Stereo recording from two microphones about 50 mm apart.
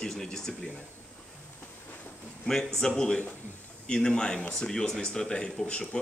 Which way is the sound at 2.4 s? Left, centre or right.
Centre.